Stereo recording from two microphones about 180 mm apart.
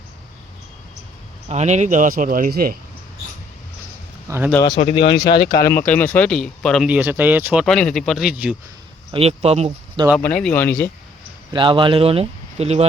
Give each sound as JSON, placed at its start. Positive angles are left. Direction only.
{"t": 1.5, "sound": "speech", "side_deg": -40}
{"t": 4.3, "sound": "speech", "side_deg": -10}
{"t": 4.8, "sound": "speech", "side_deg": 35}
{"t": 5.6, "sound": "speech", "side_deg": 10}
{"t": 7.6, "sound": "speech", "side_deg": 5}
{"t": 9.1, "sound": "speech", "side_deg": -35}
{"t": 10.2, "sound": "speech", "side_deg": 10}
{"t": 11.5, "sound": "speech", "side_deg": -25}